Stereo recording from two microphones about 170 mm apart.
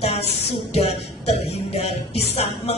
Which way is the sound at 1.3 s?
40° left (ahead or behind).